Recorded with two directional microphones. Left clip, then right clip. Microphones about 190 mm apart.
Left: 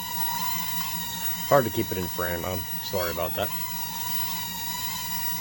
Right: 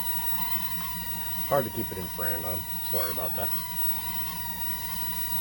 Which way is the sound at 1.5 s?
50° left (ahead or behind).